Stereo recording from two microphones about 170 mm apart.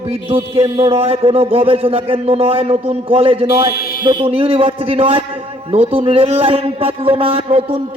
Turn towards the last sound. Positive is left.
turn(degrees=-35)  # may be behind; listen again after turning